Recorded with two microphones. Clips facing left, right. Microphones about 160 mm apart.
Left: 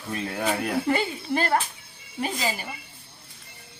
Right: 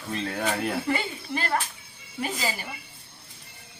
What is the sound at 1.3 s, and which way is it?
Speech, 45° left (ahead or behind).